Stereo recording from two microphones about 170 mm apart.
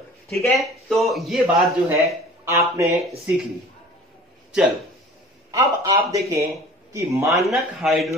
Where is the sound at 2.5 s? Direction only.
15° right (ahead or behind).